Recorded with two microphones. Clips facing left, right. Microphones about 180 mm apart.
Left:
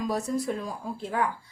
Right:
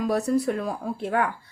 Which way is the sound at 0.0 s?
65° right (ahead or behind).